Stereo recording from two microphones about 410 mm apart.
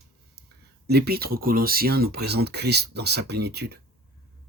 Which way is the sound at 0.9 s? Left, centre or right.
Right.